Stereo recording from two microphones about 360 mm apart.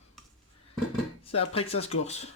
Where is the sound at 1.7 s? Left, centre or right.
Left.